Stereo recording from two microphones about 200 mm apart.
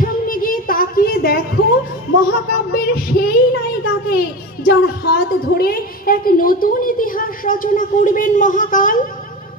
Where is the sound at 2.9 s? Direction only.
50° left (ahead or behind).